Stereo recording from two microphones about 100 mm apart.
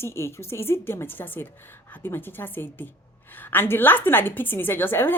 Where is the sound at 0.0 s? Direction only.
25° left (ahead or behind).